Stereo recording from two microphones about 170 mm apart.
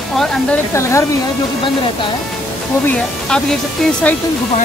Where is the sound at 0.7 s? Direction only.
15° left (ahead or behind).